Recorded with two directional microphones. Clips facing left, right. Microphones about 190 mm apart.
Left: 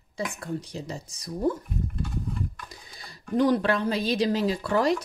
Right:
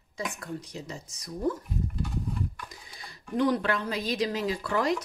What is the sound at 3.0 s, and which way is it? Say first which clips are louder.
Speech: left 3 dB; 35° left (ahead or behind).